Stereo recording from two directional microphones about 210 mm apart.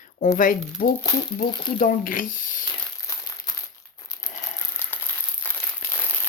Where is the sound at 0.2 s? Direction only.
40° left (ahead or behind).